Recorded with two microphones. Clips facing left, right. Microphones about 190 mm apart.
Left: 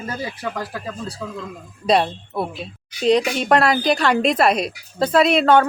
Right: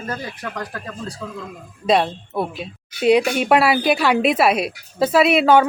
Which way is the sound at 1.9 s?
Centre (ahead or behind).